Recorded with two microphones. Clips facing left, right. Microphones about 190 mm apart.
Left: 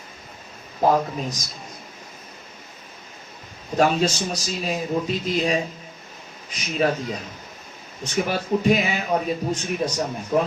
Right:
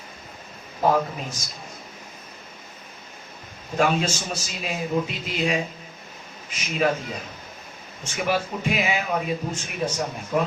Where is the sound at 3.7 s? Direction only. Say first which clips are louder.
Left 3 dB; 40° left (ahead or behind).